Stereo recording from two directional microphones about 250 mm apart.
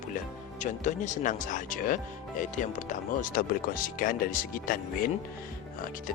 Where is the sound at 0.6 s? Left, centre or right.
Left.